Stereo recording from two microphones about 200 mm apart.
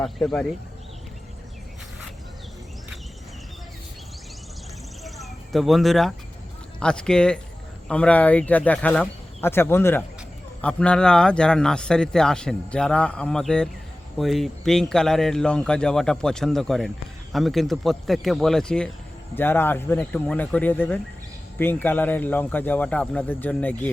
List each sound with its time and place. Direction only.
0.0 s a man's voice: centre (ahead or behind)
5.0 s a sound: centre (ahead or behind)
6.7 s a man's voice: 5° left (ahead or behind)